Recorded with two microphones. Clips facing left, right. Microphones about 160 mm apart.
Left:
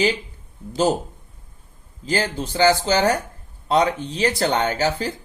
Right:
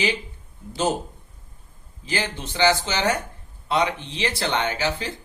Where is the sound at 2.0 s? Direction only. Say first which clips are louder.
Left 5 dB; 40° left (ahead or behind).